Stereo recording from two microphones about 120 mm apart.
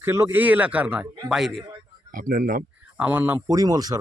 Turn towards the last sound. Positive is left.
turn(degrees=-30)  # may be behind; listen again after turning